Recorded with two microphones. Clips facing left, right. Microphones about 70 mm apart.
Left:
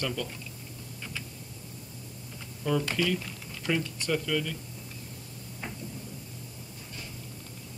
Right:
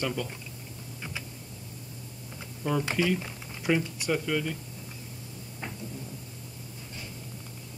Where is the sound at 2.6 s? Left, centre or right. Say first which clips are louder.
Right 1 dB; centre.